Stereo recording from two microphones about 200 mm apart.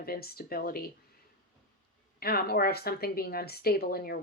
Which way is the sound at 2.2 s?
50° left (ahead or behind).